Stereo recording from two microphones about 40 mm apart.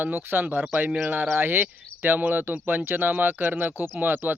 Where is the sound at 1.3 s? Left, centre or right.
Right.